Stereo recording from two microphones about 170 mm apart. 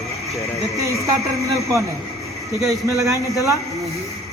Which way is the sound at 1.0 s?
20° right (ahead or behind).